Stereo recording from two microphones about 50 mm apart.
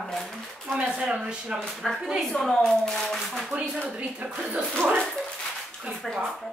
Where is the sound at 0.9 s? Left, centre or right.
Centre.